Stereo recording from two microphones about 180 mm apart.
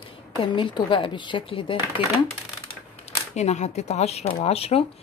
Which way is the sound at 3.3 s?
40° left (ahead or behind).